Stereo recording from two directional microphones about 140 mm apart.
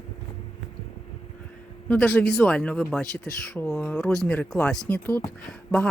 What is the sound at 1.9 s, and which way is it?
Speech, 10° left (ahead or behind).